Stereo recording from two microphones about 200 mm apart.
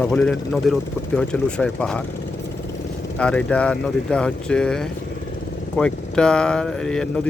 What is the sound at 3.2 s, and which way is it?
Speech, 5° left (ahead or behind).